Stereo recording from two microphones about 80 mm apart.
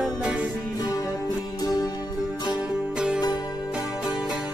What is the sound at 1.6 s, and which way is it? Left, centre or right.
Music, left.